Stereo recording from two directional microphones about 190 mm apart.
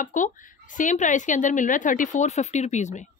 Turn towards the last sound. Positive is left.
turn(degrees=40)  # may be behind; listen again after turning